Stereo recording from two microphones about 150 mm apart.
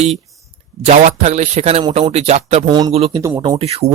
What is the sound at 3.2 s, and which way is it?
Speech, 20° right (ahead or behind).